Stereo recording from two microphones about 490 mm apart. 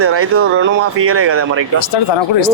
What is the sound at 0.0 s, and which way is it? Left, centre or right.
Speech, right.